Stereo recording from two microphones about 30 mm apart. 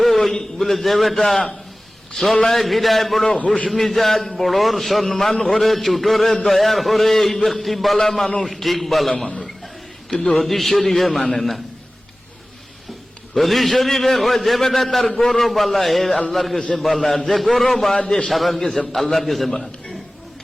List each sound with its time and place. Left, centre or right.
0.0 s a sound: centre
0.6 s a man's voice: centre
3.3 s a man's voice: left
3.8 s a man's voice: centre
7.9 s a man's voice: centre
10.3 s a man's voice: centre
13.3 s a man's voice: centre